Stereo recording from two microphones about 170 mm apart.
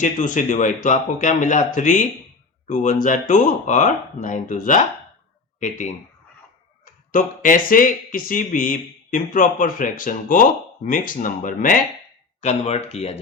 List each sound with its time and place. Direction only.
0.0 s speech: 50° left (ahead or behind)
7.1 s speech: 50° left (ahead or behind)
12.4 s speech: 40° left (ahead or behind)